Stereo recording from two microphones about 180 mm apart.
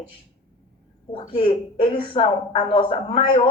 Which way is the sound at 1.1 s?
30° left (ahead or behind).